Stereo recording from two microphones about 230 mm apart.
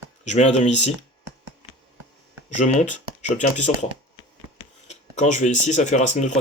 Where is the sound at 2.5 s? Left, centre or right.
Left.